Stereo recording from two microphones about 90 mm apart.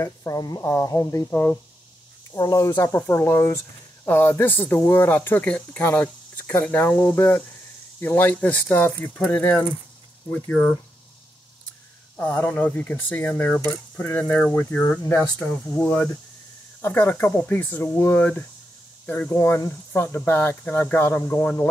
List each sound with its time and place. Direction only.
0.0 s speech: 40° left (ahead or behind)
1.2 s speech: 25° left (ahead or behind)
2.3 s speech: 45° left (ahead or behind)
3.0 s speech: 20° left (ahead or behind)
9.2 s a sound: 15° left (ahead or behind)
12.2 s speech: 20° left (ahead or behind)
13.9 s a sound: 15° left (ahead or behind)
15.4 s speech: 15° left (ahead or behind)